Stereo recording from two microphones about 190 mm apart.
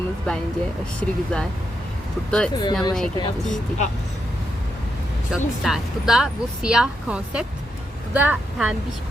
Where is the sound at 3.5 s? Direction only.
40° left (ahead or behind).